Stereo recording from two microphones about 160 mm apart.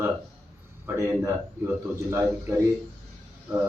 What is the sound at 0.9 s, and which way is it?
Speech, 15° right (ahead or behind).